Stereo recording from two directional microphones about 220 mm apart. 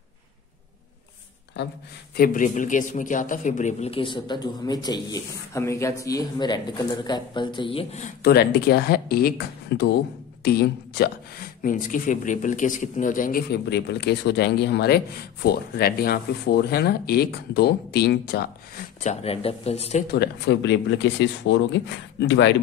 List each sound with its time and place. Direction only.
1.6 s speech: 50° left (ahead or behind)
2.1 s a man's voice: 40° left (ahead or behind)
8.2 s speech: 45° left (ahead or behind)
11.6 s a man's voice: 35° left (ahead or behind)
19.0 s a man's voice: 25° left (ahead or behind)
20.1 s speech: 50° left (ahead or behind)